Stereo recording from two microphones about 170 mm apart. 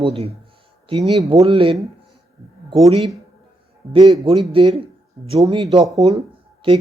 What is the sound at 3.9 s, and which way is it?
A man's voice, 25° right (ahead or behind).